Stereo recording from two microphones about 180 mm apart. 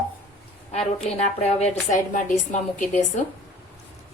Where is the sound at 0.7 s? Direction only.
35° left (ahead or behind).